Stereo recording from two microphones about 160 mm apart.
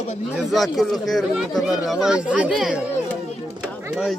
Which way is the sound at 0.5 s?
Centre (ahead or behind).